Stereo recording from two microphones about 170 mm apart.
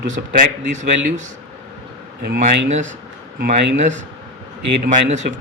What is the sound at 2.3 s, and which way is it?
Speech, 70° right (ahead or behind).